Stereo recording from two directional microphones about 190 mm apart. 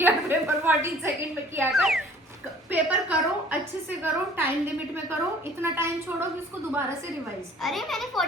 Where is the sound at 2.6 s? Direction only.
10° right (ahead or behind).